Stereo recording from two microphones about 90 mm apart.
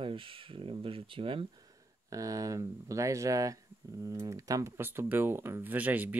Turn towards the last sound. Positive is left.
turn(degrees=-15)  # may be behind; listen again after turning